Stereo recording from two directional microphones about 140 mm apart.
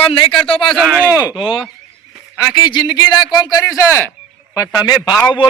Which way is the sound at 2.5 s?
30° left (ahead or behind).